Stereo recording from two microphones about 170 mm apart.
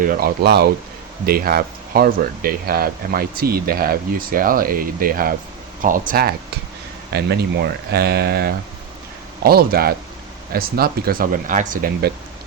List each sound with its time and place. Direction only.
0.0 s speech: 60° right (ahead or behind)
1.2 s speech: 60° right (ahead or behind)
7.1 s speech: 75° right (ahead or behind); by 12.1 s 55° right (ahead or behind)